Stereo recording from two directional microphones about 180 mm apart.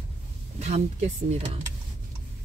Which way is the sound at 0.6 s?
40° right (ahead or behind).